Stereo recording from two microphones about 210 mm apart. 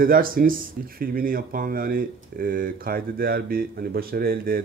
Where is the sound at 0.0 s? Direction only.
45° right (ahead or behind).